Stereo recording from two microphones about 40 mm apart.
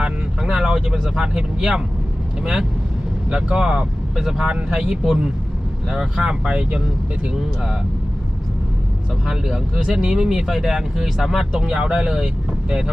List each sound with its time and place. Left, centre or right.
0.0 s vehicle: centre
2.4 s speech: centre
9.2 s speech: centre
11.6 s speech: right